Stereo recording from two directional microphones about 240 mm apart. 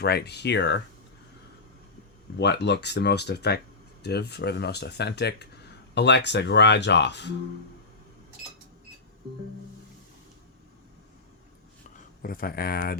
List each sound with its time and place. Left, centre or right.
0.0 s speech: left
2.4 s speech: left
11.9 s speech: left